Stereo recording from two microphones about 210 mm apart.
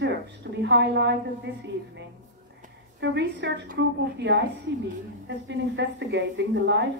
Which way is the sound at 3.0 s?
55° right (ahead or behind).